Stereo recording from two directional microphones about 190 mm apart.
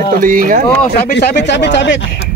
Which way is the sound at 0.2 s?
45° right (ahead or behind).